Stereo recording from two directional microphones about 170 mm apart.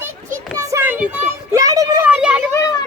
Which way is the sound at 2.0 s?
5° right (ahead or behind).